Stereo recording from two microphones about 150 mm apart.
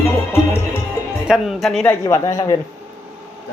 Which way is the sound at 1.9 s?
20° left (ahead or behind).